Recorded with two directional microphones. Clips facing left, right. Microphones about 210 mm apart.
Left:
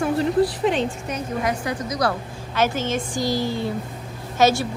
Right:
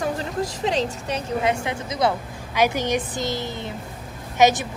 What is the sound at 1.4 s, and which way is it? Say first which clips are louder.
Speech: right 1 dB; 25° right (ahead or behind).